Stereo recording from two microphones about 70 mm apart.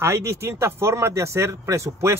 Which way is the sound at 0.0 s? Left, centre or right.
Right.